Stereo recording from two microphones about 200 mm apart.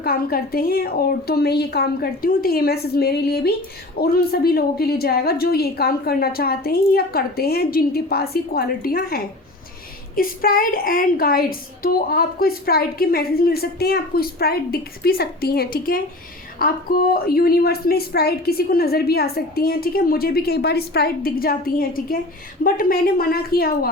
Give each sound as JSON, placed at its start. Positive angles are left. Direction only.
{"t": 0.0, "sound": "a woman's voice", "side_deg": 50}